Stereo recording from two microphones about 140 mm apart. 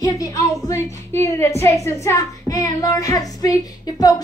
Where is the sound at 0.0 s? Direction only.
25° left (ahead or behind).